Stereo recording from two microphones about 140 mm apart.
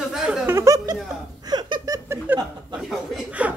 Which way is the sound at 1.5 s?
30° right (ahead or behind).